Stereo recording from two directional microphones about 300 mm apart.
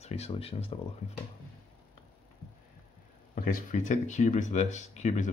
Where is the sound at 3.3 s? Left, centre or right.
Left.